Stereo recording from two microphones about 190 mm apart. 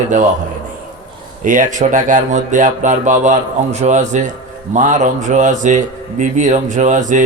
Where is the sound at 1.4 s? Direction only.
45° right (ahead or behind).